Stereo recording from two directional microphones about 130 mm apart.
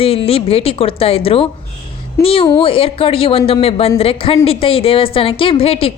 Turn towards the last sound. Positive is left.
turn(degrees=50)  # may be behind; listen again after turning